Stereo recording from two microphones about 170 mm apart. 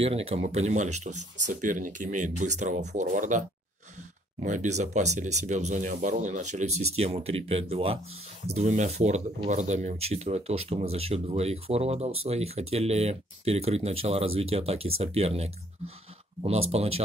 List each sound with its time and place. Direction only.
0.0 s speech: 35° right (ahead or behind)